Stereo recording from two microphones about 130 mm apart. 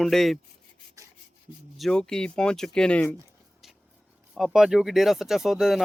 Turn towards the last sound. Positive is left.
turn(degrees=-5)  # may be behind; listen again after turning